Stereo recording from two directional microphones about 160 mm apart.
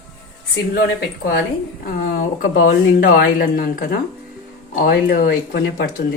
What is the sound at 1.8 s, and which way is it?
Speech, 60° left (ahead or behind).